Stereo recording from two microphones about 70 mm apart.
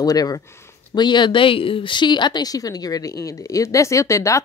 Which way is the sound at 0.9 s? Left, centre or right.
Left.